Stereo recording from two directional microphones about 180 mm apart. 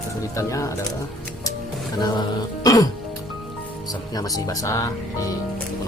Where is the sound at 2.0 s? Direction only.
20° left (ahead or behind).